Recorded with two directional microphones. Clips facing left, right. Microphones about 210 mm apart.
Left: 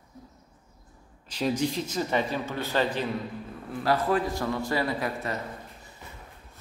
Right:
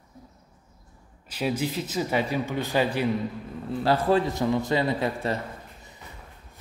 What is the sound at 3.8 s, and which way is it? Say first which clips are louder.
A man's voice: right 3 dB; 25° right (ahead or behind).